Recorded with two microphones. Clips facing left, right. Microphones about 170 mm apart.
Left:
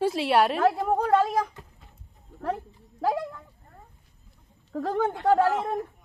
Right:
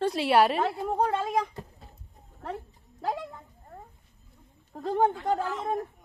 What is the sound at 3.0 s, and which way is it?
Speech, 90° left.